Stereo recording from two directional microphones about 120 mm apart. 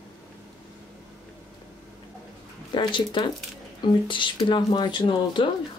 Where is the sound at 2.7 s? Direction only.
40° left (ahead or behind).